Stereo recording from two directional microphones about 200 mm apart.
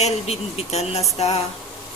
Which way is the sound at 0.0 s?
30° left (ahead or behind).